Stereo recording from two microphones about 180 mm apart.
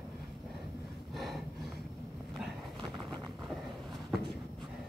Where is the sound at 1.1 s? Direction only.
Centre (ahead or behind).